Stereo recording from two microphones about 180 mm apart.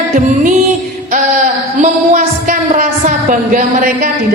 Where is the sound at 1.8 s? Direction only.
45° right (ahead or behind).